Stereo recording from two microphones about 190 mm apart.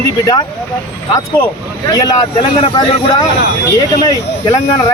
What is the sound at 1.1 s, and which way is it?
Speech, 10° left (ahead or behind).